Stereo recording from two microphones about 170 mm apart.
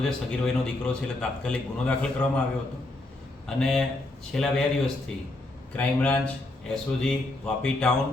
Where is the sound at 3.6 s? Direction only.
5° left (ahead or behind).